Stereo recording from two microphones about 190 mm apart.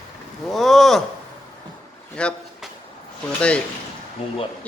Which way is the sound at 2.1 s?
5° left (ahead or behind).